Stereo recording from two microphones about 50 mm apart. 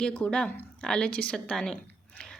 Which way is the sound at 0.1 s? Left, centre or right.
Left.